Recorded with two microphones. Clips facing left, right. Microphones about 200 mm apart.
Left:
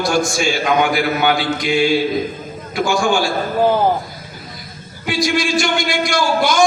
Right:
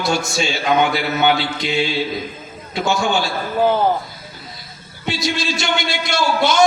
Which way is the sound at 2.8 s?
25° right (ahead or behind).